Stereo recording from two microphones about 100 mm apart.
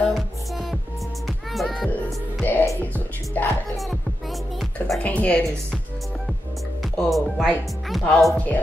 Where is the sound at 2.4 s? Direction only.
20° left (ahead or behind).